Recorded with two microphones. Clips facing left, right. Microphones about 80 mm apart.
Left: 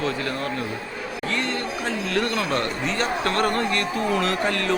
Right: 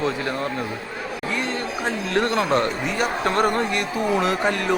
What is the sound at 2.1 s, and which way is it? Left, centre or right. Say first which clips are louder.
Speech: right 4 dB; right.